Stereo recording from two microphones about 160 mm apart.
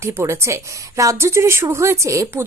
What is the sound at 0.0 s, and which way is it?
A woman's voice, 15° right (ahead or behind).